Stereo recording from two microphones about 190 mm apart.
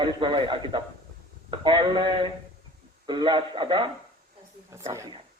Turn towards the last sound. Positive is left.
turn(degrees=-15)  # may be behind; listen again after turning